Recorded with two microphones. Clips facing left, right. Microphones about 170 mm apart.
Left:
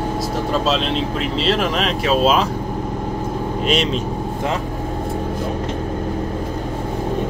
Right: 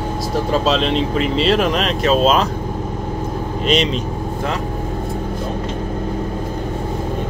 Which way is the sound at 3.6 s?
5° left (ahead or behind).